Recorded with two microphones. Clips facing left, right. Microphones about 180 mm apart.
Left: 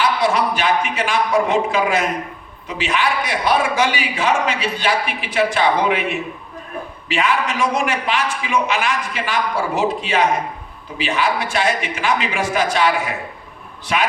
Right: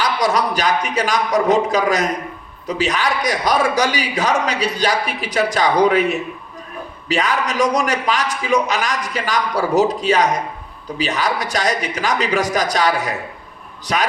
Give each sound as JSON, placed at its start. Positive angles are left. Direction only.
{"t": 0.0, "sound": "a man's voice", "side_deg": -40}